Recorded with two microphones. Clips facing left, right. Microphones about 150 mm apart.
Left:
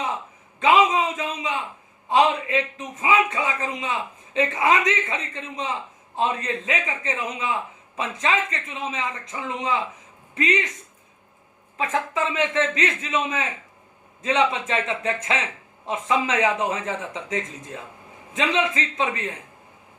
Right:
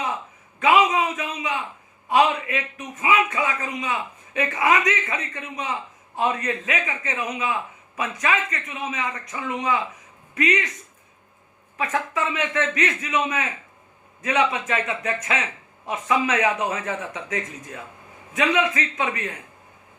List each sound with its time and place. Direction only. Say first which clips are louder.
0.6 s a sound: even; 25° left (ahead or behind)
2.0 s a man's voice: even; 25° left (ahead or behind)
11.8 s a man's voice: left 1 dB; 25° left (ahead or behind)